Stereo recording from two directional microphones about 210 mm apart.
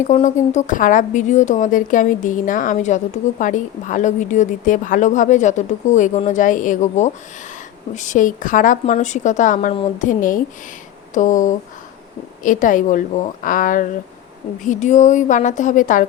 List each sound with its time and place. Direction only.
0.0 s a woman's voice: 35° left (ahead or behind)